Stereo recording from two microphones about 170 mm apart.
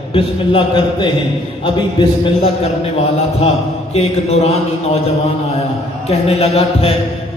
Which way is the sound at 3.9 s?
35° left (ahead or behind).